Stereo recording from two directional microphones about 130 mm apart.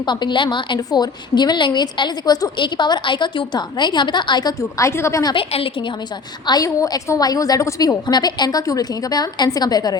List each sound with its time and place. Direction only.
0.0 s a woman's voice: 35° left (ahead or behind)
5.3 s a woman's voice: 45° left (ahead or behind)
6.4 s a woman's voice: 30° left (ahead or behind)